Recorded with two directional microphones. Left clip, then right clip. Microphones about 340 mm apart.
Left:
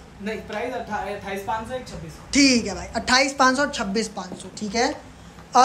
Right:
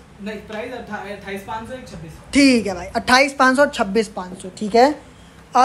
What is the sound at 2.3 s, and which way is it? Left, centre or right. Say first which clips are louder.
A woman's voice: right 3 dB; centre.